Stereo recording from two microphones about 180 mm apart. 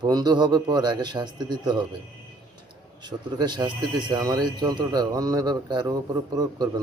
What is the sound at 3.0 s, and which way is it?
Speech, 25° right (ahead or behind).